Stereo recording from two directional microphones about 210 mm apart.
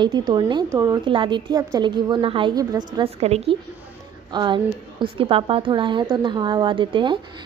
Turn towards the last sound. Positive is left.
turn(degrees=-25)  # may be behind; listen again after turning